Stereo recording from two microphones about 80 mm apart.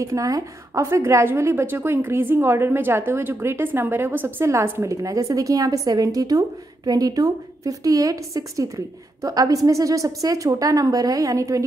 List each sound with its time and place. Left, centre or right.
0.0 s a woman's voice: right
5.0 s a woman's voice: right